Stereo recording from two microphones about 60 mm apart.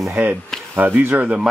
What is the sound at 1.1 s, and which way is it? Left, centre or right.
Speech, right.